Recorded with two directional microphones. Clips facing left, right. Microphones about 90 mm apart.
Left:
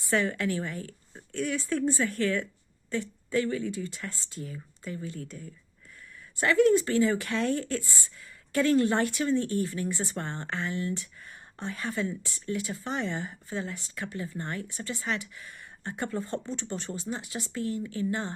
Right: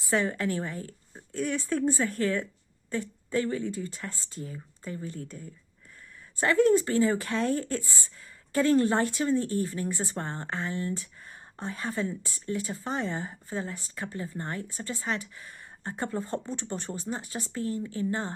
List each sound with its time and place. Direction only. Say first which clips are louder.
0.1 s speech: even; 30° right (ahead or behind)
9.9 s speech: even; 20° right (ahead or behind)
10.4 s speech: left 1 dB; 30° right (ahead or behind)
16.7 s speech: even; 50° right (ahead or behind)
17.1 s speech: right 1 dB; 40° right (ahead or behind)